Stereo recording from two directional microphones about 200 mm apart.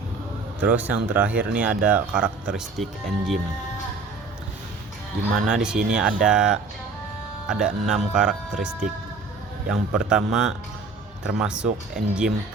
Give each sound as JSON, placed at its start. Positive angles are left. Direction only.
{"t": 0.6, "sound": "speech", "side_deg": -5}
{"t": 5.5, "sound": "speech", "side_deg": -5}